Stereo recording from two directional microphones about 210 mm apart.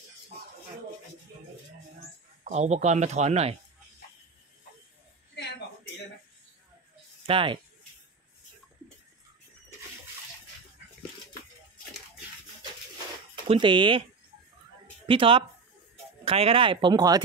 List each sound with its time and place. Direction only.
2.4 s speech: 35° right (ahead or behind)
7.2 s speech: 25° right (ahead or behind)
13.5 s speech: 25° right (ahead or behind)
15.0 s speech: 25° right (ahead or behind)